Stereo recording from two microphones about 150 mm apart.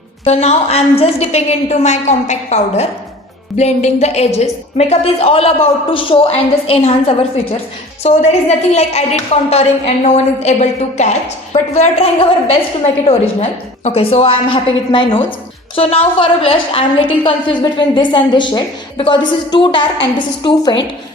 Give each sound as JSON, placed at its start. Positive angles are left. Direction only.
{"t": 0.3, "sound": "a woman's voice", "side_deg": 45}
{"t": 13.8, "sound": "a woman's voice", "side_deg": 40}